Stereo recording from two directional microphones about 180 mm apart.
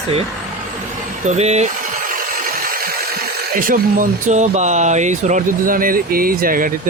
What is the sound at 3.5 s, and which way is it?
Speech, 50° right (ahead or behind).